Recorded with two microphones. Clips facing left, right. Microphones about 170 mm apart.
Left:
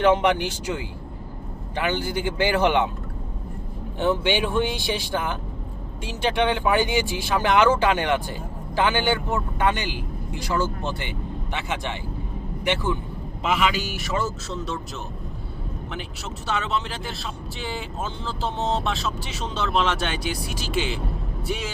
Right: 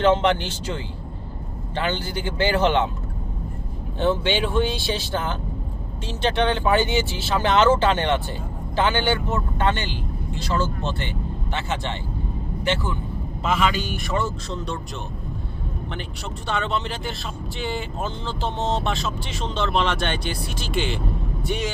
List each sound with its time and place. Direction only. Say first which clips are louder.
0.0 s speech: even; 10° left (ahead or behind)
4.0 s speech: even; 15° left (ahead or behind)
16.5 s speech: right 1 dB; centre (ahead or behind)